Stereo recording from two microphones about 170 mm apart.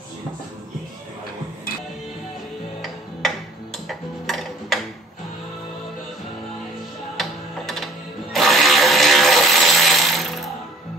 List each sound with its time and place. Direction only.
2.8 s music: centre (ahead or behind)
7.2 s music: centre (ahead or behind)